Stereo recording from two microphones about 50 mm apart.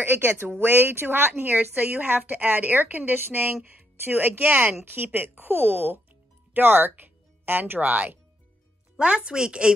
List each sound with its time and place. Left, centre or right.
0.0 s speech: right
7.8 s speech: right
8.9 s speech: right